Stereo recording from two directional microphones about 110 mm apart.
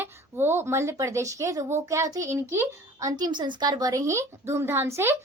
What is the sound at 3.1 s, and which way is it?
A woman's voice, 40° right (ahead or behind).